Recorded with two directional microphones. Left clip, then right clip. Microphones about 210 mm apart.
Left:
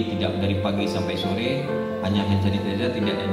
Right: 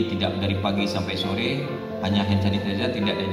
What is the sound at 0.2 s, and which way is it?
Music, 35° right (ahead or behind).